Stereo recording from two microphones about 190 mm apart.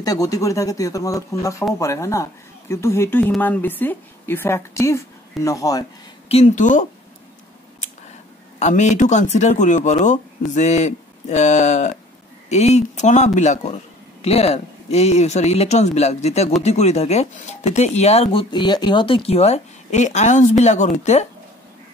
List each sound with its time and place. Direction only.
0.0 s speech: 20° left (ahead or behind)
6.2 s speech: 35° left (ahead or behind)
8.5 s speech: 40° left (ahead or behind)